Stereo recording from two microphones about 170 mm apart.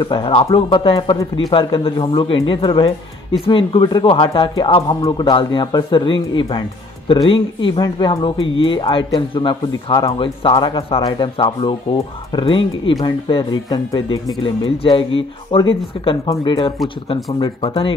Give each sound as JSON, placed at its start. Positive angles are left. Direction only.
{"t": 0.0, "sound": "speech", "side_deg": 30}